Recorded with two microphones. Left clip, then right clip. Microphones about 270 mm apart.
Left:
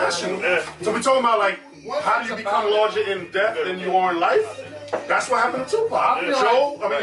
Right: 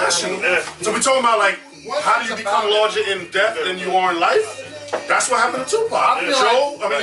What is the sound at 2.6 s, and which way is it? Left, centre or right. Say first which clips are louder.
Speech: right 2 dB; centre.